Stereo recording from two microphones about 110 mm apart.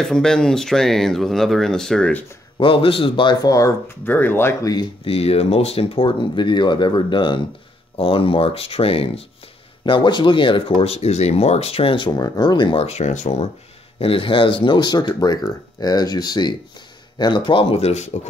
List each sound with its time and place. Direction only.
0.0 s speech: 5° left (ahead or behind)
2.5 s speech: 50° left (ahead or behind)
3.4 s speech: 30° left (ahead or behind)
4.0 s speech: 20° left (ahead or behind)
5.0 s speech: 65° left (ahead or behind)
9.8 s speech: 45° left (ahead or behind)
12.7 s speech: 75° left (ahead or behind)
13.9 s speech: 55° left (ahead or behind); by 18.3 s 90° left